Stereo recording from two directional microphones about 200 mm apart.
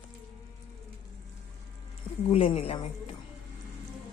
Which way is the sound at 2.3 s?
30° left (ahead or behind).